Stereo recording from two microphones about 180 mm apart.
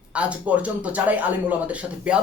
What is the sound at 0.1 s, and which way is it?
Speech, 5° right (ahead or behind).